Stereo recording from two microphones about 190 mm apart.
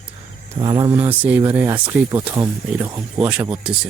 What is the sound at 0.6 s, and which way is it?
Speech, 25° right (ahead or behind).